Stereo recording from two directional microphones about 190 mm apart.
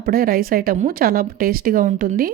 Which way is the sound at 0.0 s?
50° right (ahead or behind).